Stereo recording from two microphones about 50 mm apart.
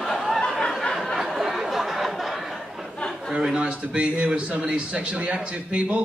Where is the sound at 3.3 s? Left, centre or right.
Centre.